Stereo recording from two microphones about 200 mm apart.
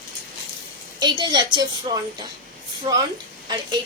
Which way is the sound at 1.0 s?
20° right (ahead or behind).